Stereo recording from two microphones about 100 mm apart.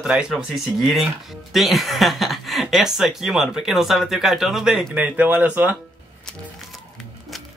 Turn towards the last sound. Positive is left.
turn(degrees=-15)  # may be behind; listen again after turning